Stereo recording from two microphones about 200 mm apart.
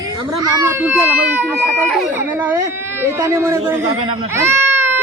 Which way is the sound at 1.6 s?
5° left (ahead or behind).